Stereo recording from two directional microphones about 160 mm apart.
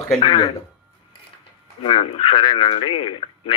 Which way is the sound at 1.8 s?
35° left (ahead or behind).